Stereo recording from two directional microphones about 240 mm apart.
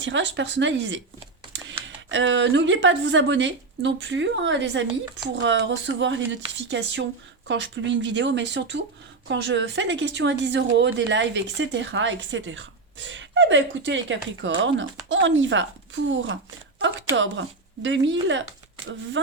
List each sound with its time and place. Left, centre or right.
0.0 s speech: right